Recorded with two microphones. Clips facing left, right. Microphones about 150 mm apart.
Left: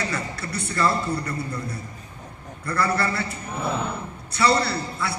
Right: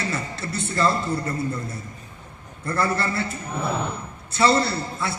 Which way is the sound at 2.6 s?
25° right (ahead or behind).